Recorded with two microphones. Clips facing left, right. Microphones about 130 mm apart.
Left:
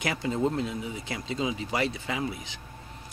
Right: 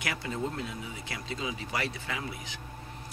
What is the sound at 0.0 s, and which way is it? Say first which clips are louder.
A man's voice: left 6 dB; 25° left (ahead or behind).